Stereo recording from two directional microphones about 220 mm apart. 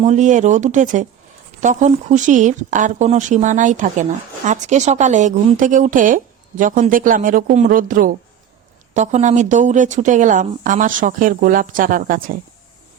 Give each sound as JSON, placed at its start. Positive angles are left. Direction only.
{"t": 0.0, "sound": "speech", "side_deg": -30}